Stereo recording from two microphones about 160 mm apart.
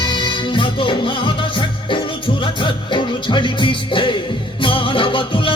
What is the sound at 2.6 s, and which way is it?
Music, 30° left (ahead or behind).